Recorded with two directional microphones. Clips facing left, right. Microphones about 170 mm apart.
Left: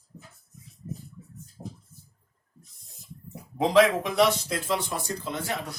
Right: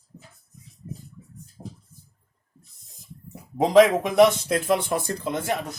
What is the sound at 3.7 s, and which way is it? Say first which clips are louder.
Speech: right 4 dB; 55° right (ahead or behind).